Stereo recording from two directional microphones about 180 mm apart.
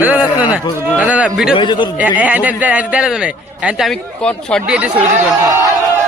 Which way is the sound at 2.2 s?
10° right (ahead or behind).